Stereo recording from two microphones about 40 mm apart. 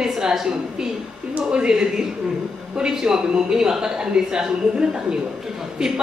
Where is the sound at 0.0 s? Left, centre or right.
Centre.